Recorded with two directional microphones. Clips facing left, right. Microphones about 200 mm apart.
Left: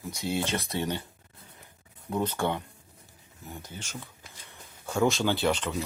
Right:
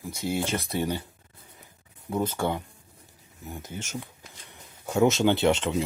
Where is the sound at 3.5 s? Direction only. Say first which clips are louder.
Right 5 dB; 20° right (ahead or behind).